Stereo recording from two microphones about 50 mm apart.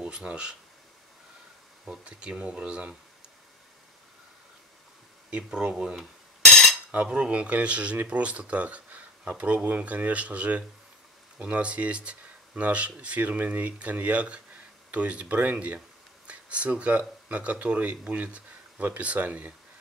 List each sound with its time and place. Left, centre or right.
0.0 s speech: right
2.0 s speech: right
5.3 s speech: centre
6.9 s speech: right